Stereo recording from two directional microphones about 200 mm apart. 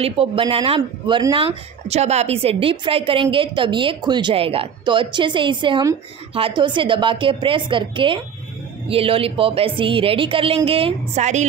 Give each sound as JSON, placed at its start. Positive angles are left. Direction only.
{"t": 0.0, "sound": "speech", "side_deg": -30}